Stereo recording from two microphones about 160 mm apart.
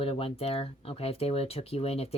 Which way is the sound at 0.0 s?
35° left (ahead or behind).